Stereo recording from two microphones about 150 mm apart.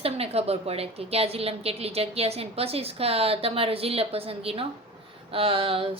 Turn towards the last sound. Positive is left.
turn(degrees=-40)  # may be behind; listen again after turning